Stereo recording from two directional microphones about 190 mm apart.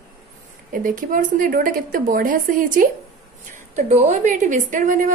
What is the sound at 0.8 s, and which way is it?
A woman's voice, 45° right (ahead or behind).